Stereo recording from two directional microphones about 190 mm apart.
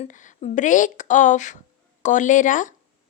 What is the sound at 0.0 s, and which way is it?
A woman's voice, 40° left (ahead or behind).